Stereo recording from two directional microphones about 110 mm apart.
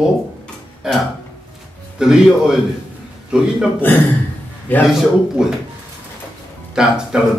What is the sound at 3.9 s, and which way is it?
Speech, 15° left (ahead or behind).